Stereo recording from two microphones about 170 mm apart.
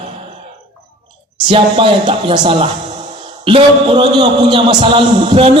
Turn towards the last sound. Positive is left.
turn(degrees=-30)  # may be behind; listen again after turning